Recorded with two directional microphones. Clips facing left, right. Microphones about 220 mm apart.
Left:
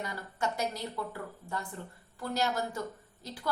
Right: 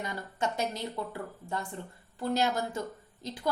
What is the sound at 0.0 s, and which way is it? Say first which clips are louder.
A woman's voice: right 2 dB; 20° right (ahead or behind).